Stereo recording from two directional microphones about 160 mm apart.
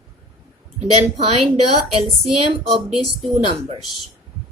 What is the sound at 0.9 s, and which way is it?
Speech, 40° right (ahead or behind).